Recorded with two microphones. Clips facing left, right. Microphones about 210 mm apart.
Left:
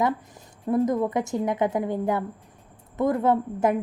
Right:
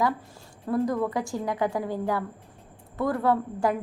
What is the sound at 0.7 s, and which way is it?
A woman's voice, 20° left (ahead or behind).